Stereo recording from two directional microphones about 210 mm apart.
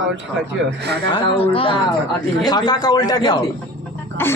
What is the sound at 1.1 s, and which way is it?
A man's voice, 25° left (ahead or behind).